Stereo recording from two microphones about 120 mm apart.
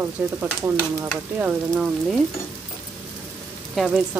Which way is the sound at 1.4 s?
5° right (ahead or behind).